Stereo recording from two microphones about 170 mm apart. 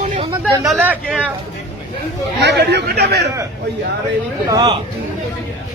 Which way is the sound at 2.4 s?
80° right.